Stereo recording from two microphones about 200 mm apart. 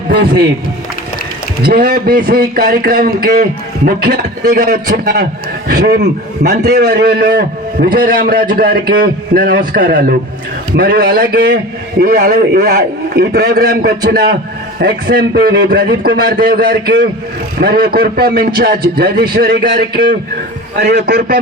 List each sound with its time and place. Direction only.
0.1 s speech: 55° right (ahead or behind)
1.6 s a man's voice: 50° right (ahead or behind)